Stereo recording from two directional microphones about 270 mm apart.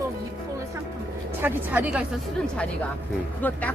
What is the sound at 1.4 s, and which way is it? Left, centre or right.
Speech, centre.